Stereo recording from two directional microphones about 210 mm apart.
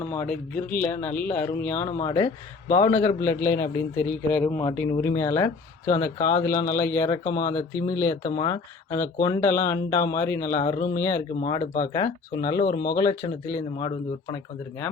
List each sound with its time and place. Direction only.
0.1 s speech: 10° left (ahead or behind)
11.4 s speech: 35° left (ahead or behind)
13.0 s speech: 20° left (ahead or behind)